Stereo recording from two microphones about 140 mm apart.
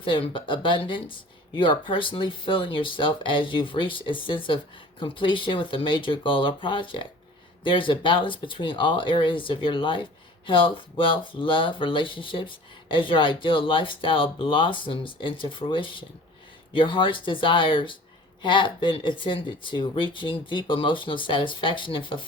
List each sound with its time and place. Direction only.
0.0 s speech: 40° left (ahead or behind)